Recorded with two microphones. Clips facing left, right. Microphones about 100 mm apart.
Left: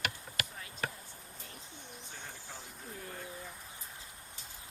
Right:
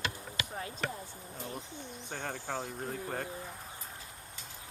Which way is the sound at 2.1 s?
75° right (ahead or behind).